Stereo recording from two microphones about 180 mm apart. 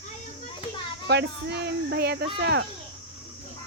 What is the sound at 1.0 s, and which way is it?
Speech, 65° right (ahead or behind).